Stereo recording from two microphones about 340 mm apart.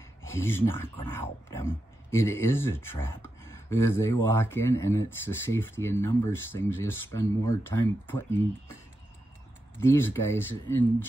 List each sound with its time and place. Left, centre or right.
0.2 s speech: centre
9.8 s speech: centre